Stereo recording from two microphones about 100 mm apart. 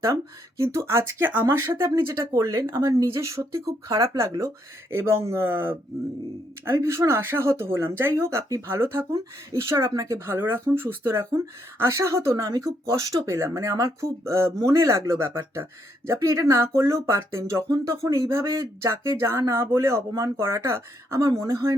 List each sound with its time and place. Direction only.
0.0 s speech: 30° right (ahead or behind)